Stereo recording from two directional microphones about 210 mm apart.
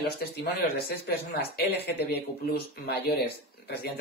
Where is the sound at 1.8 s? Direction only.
50° left (ahead or behind).